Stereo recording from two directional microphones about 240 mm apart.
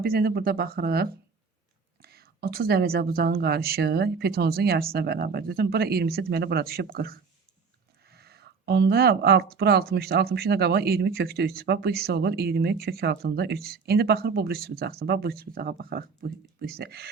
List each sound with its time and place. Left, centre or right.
0.0 s speech: right